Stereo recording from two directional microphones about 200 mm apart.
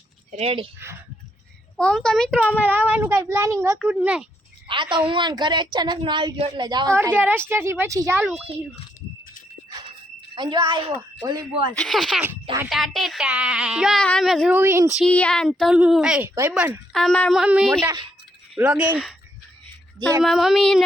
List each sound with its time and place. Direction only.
0.3 s speech: 30° right (ahead or behind)
1.7 s speech: 5° left (ahead or behind)
2.6 s speech: 10° right (ahead or behind)
4.7 s a woman's voice: 25° right (ahead or behind)
10.3 s a woman's voice: 20° right (ahead or behind)
11.8 s speech: centre (ahead or behind)
14.5 s speech: 15° right (ahead or behind)
14.9 s speech: 5° left (ahead or behind)
16.9 s speech: centre (ahead or behind)
20.2 s speech: centre (ahead or behind)